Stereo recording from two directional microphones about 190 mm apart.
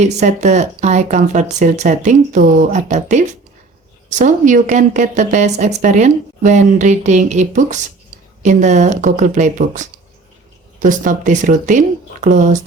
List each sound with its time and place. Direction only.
0.0 s a woman's voice: 40° right (ahead or behind)